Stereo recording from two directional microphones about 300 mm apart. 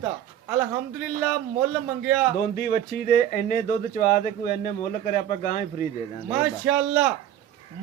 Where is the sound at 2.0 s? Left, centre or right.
Centre.